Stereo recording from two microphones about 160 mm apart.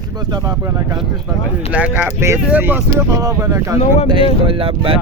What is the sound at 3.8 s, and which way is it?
Speech, 45° left (ahead or behind).